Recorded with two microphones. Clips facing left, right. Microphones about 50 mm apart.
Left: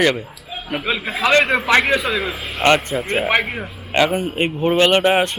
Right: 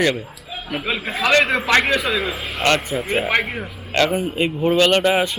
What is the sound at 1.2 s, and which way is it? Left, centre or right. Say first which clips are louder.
Speech: left 1 dB; left.